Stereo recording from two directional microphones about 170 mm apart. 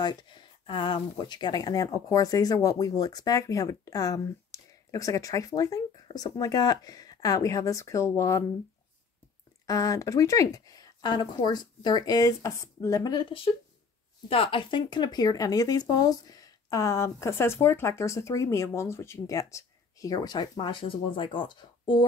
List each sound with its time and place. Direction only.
0.0 s speech: 25° left (ahead or behind)
9.7 s speech: 20° left (ahead or behind)